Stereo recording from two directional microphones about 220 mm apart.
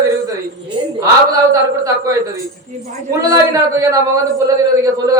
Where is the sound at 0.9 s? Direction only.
15° right (ahead or behind).